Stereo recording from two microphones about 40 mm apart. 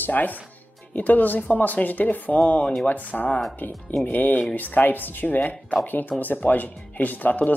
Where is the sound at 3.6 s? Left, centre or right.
Left.